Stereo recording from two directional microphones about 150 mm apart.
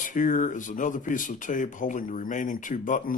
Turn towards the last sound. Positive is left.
turn(degrees=60)  # may be behind; listen again after turning